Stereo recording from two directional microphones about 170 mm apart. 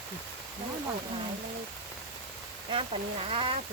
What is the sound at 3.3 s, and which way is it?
Speech, 30° right (ahead or behind).